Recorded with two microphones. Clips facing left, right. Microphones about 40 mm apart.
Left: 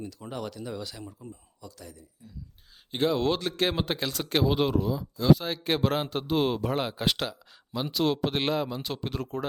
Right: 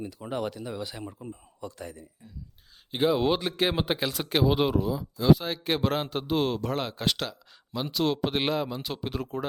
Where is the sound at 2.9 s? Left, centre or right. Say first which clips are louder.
Right 2 dB; centre.